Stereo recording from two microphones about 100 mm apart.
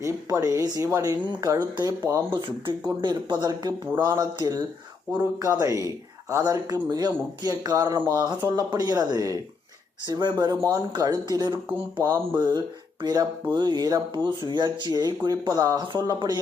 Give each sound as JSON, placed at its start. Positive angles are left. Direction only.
{"t": 0.0, "sound": "speech", "side_deg": -35}
{"t": 2.3, "sound": "speech", "side_deg": -55}